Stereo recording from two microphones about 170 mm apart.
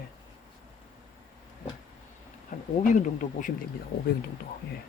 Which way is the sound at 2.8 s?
50° left (ahead or behind).